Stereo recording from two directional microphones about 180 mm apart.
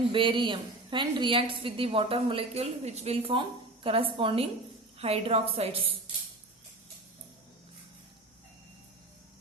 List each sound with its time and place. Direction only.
0.1 s a woman's voice: 25° right (ahead or behind)